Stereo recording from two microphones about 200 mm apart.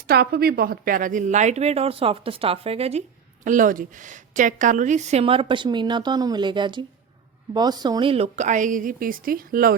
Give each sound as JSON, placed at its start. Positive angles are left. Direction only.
{"t": 0.1, "sound": "a woman's voice", "side_deg": -50}
{"t": 3.4, "sound": "a woman's voice", "side_deg": -40}